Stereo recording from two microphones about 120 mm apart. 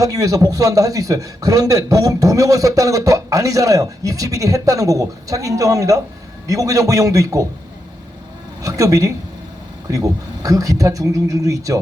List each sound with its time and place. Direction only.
0.0 s a man's voice: 30° right (ahead or behind)
8.6 s a man's voice: 30° right (ahead or behind)